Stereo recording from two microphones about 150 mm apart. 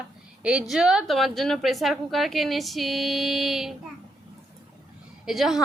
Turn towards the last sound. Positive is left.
turn(degrees=-5)  # may be behind; listen again after turning